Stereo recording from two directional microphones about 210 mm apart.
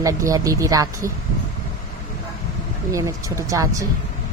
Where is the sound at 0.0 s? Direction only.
15° right (ahead or behind).